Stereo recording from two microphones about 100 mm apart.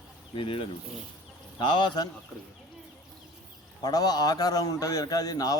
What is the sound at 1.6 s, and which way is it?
Speech, 50° left (ahead or behind).